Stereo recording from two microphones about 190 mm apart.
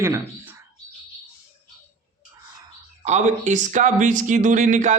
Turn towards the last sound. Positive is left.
turn(degrees=-40)  # may be behind; listen again after turning